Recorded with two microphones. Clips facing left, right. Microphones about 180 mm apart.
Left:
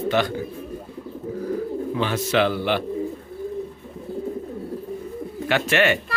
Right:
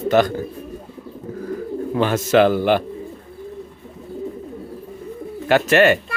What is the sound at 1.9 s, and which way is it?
Speech, 45° right (ahead or behind).